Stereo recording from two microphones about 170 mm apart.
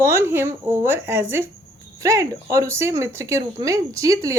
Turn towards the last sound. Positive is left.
turn(degrees=-20)  # may be behind; listen again after turning